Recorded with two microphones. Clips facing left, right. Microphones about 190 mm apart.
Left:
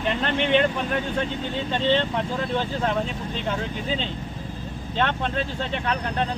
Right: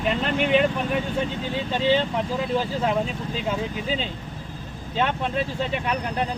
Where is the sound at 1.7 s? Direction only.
10° right (ahead or behind).